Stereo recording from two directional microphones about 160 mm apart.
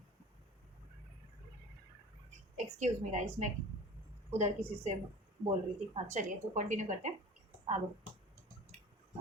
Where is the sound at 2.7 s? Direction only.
50° right (ahead or behind).